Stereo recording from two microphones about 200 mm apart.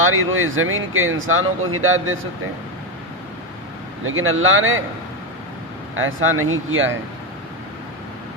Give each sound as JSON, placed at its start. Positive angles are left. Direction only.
{"t": 0.0, "sound": "speech", "side_deg": -90}
{"t": 4.0, "sound": "speech", "side_deg": -85}
{"t": 6.0, "sound": "speech", "side_deg": -80}